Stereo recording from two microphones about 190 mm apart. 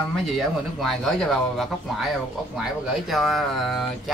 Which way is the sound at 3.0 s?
Centre (ahead or behind).